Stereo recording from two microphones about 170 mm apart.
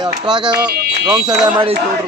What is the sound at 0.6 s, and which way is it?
Speech, 5° right (ahead or behind).